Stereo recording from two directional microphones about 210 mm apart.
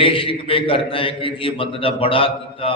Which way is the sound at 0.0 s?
25° left (ahead or behind).